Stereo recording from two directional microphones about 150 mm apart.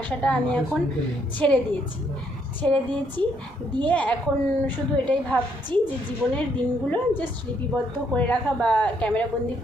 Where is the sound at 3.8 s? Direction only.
10° left (ahead or behind).